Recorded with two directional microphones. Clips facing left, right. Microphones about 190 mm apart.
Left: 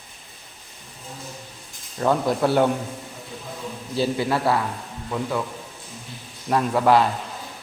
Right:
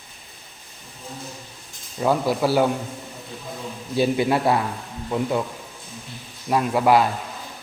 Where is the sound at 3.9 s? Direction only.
20° right (ahead or behind).